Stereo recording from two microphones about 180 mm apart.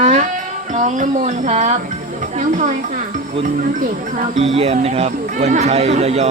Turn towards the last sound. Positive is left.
turn(degrees=-35)  # may be behind; listen again after turning